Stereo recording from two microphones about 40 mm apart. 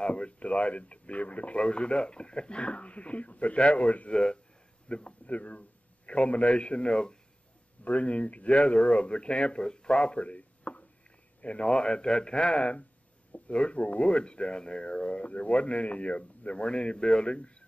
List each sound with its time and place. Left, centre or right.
0.0 s speech: left
4.1 s a man's voice: left
7.8 s speech: left